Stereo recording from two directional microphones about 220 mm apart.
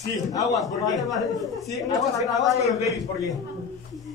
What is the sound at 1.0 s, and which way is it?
Music, centre (ahead or behind).